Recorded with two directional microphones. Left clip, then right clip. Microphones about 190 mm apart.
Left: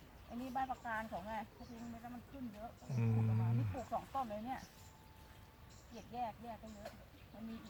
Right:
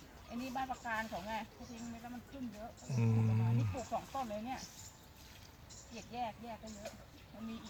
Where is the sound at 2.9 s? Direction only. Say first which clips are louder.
Right 4 dB; 15° right (ahead or behind).